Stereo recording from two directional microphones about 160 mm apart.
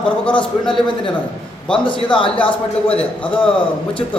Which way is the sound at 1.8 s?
30° left (ahead or behind).